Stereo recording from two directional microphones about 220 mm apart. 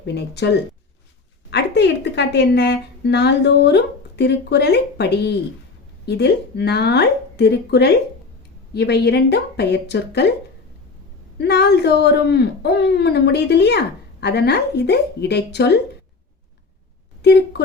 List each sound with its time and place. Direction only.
0.0 s speech: 50° left (ahead or behind)
11.3 s speech: 50° left (ahead or behind)
17.2 s speech: 50° left (ahead or behind)